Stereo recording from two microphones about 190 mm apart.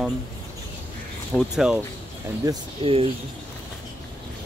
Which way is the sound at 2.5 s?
30° right (ahead or behind).